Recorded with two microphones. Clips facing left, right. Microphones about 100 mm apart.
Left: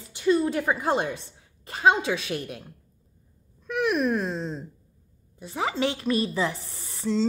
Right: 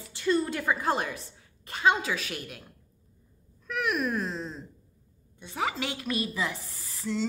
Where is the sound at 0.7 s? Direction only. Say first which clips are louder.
Left 3 dB; 20° left (ahead or behind).